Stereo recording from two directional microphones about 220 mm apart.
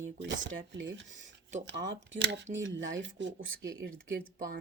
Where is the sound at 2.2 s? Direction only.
55° right (ahead or behind).